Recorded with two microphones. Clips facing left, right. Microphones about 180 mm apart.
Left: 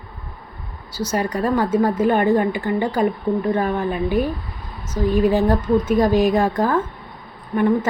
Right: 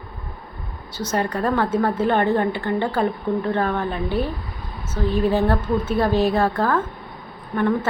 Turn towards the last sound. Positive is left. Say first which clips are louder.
# left 3 dB
turn(degrees=15)  # may be behind; listen again after turning